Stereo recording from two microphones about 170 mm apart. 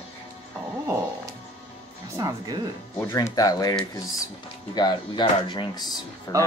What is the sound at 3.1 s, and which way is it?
Speech, 20° left (ahead or behind).